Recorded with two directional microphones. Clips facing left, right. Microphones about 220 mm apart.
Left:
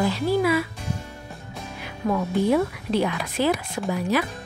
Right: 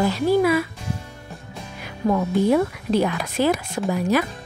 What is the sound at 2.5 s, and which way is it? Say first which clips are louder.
A woman's voice: right 2 dB; 45° right (ahead or behind).